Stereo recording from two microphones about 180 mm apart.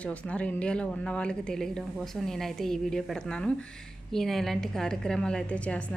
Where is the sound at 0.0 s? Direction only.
5° left (ahead or behind).